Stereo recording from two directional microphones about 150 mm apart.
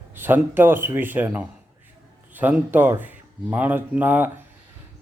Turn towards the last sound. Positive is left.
turn(degrees=-10)  # may be behind; listen again after turning